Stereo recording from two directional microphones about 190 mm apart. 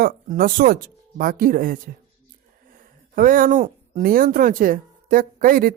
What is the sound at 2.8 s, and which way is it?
Speech, 45° right (ahead or behind).